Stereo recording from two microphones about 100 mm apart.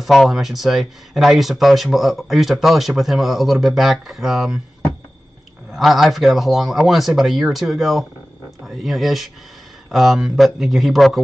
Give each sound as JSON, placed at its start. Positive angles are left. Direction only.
{"t": 0.0, "sound": "speech", "side_deg": 0}
{"t": 5.7, "sound": "speech", "side_deg": 0}